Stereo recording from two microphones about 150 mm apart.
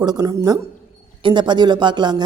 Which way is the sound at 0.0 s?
25° right (ahead or behind).